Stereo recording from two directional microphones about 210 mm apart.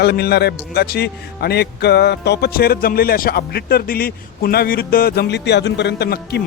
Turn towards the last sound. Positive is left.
turn(degrees=50)  # may be behind; listen again after turning